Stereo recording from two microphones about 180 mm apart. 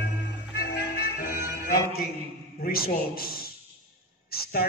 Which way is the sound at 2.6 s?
55° left (ahead or behind).